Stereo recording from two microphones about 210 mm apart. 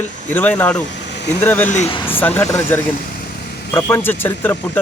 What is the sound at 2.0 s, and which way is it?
A man's voice, 10° left (ahead or behind).